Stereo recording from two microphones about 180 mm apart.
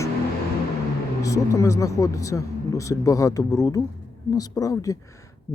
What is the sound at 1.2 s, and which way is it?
Speech, 20° left (ahead or behind).